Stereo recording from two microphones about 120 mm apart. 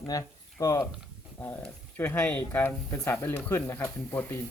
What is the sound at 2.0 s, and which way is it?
Speech, 15° left (ahead or behind).